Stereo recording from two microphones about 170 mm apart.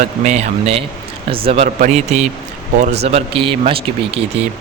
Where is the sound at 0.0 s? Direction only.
45° right (ahead or behind).